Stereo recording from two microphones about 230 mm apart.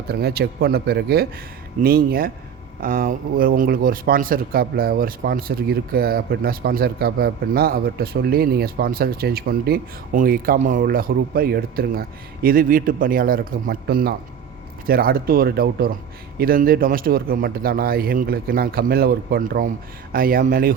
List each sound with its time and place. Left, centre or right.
0.1 s speech: right